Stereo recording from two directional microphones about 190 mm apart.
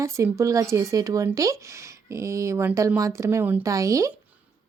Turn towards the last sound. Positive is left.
turn(degrees=-15)  # may be behind; listen again after turning